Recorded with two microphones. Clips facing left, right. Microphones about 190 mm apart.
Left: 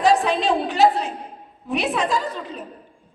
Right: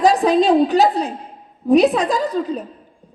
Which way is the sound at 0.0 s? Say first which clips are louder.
Right 5 dB; 40° right (ahead or behind).